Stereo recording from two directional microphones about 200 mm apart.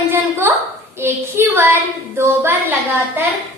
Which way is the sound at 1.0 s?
10° right (ahead or behind).